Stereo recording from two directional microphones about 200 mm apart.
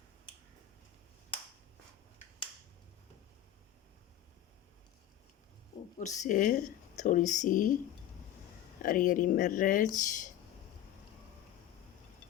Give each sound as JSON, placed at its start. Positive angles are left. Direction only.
{"t": 1.3, "sound": "finger snapping", "side_deg": 25}
{"t": 6.0, "sound": "speech", "side_deg": 40}
{"t": 8.8, "sound": "speech", "side_deg": 45}